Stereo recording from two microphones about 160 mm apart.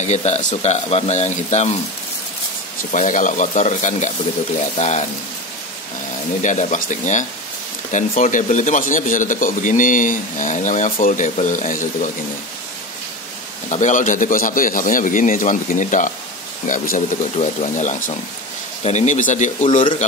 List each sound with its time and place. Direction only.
0.0 s speech: 45° left (ahead or behind)
2.9 s speech: 55° left (ahead or behind)
6.4 s speech: 50° left (ahead or behind)
13.7 s a man's voice: 50° left (ahead or behind)
17.4 s speech: 45° left (ahead or behind)